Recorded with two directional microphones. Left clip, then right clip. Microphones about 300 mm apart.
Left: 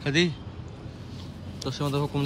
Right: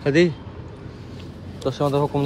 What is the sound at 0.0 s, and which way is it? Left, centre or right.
Speech, centre.